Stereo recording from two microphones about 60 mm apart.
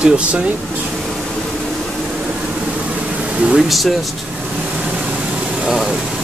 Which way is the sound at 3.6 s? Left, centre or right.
Centre.